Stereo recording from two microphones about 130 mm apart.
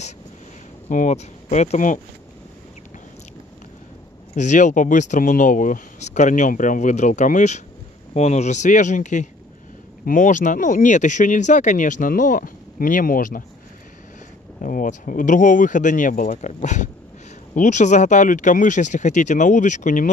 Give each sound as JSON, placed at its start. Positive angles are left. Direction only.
{"t": 0.8, "sound": "speech", "side_deg": 75}
{"t": 4.4, "sound": "speech", "side_deg": 70}
{"t": 10.0, "sound": "speech", "side_deg": 85}
{"t": 14.6, "sound": "speech", "side_deg": 90}